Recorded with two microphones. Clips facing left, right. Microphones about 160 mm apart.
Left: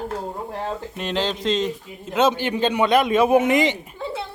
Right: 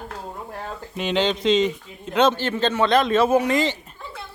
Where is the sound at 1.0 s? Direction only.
Centre (ahead or behind); by 4.2 s 20° left (ahead or behind).